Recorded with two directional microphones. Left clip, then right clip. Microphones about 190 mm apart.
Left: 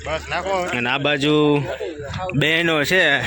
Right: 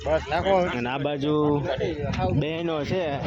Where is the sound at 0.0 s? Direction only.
45° right (ahead or behind).